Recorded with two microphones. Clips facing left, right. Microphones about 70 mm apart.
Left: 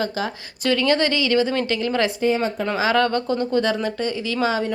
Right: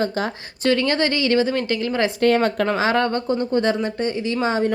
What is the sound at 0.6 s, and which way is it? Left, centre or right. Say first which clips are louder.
Speech: even; right.